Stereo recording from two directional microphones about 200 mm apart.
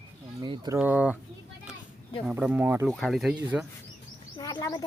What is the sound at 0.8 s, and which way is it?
Speech, 5° right (ahead or behind).